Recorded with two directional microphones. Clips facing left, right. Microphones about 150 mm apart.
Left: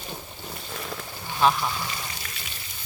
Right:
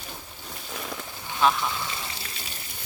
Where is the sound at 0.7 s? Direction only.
Centre (ahead or behind).